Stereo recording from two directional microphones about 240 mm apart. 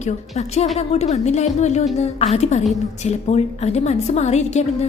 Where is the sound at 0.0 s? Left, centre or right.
Left.